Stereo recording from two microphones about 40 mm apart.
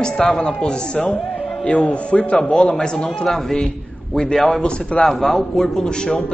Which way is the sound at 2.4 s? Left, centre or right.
Centre.